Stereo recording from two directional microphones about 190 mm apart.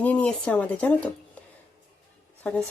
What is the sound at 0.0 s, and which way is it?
Speech, 5° left (ahead or behind).